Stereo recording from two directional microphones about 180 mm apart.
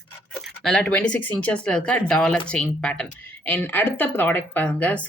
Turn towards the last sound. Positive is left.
turn(degrees=10)  # may be behind; listen again after turning